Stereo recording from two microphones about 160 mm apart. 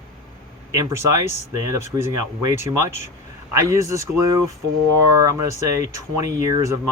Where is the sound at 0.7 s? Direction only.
20° right (ahead or behind).